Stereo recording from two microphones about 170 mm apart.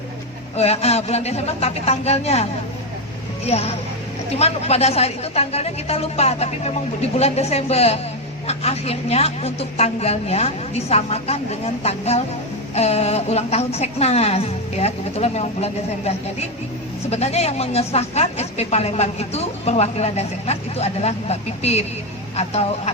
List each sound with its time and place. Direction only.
0.5 s speech: 40° left (ahead or behind)